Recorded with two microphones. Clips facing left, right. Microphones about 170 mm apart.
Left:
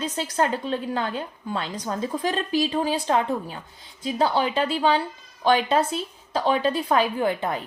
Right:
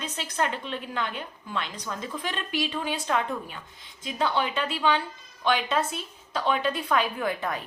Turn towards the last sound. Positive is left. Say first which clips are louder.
# left 5 dB
turn(degrees=25)  # may be behind; listen again after turning